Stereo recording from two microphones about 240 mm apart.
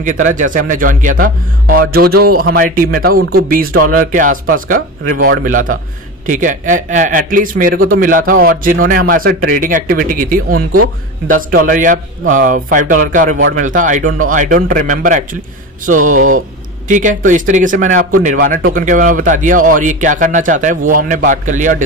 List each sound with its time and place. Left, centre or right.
0.0 s speech: right